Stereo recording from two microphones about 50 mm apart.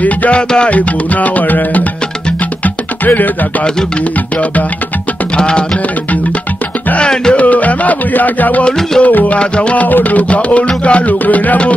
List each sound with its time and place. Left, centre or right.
0.0 s music: left
0.4 s music: centre
0.7 s music: left
5.4 s music: centre
7.0 s music: centre
7.4 s music: left
8.6 s music: centre
9.0 s music: left
9.4 s music: left
9.8 s music: left